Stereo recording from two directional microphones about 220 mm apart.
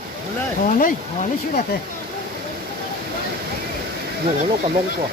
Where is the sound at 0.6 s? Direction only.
35° left (ahead or behind).